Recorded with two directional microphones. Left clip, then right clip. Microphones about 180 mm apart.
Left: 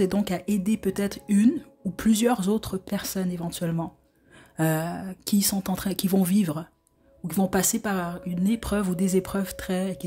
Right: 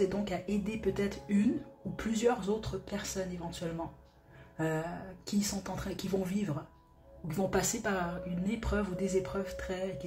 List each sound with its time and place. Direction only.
0.0 s a woman's voice: 60° left (ahead or behind)